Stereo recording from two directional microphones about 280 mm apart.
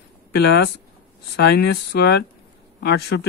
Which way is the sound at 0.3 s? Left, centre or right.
Left.